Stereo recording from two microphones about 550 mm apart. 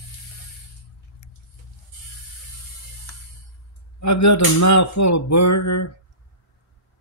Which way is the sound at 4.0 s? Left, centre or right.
Left.